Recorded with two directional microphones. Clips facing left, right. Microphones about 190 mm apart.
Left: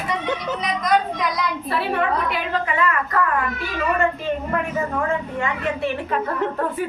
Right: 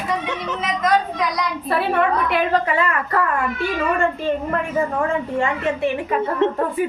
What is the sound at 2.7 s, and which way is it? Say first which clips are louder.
Speech: right 1 dB; 30° right (ahead or behind).